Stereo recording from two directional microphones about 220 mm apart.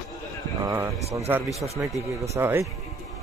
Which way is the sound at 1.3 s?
Centre (ahead or behind).